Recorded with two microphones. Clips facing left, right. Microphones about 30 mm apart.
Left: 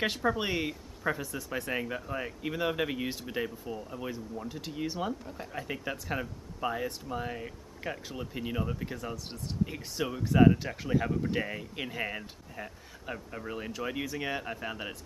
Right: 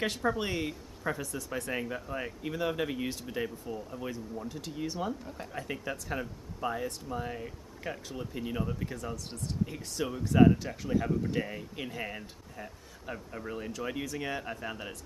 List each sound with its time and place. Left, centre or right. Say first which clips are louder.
0.0 s speech: left 1 dB; centre
5.2 s speech: left 1 dB; centre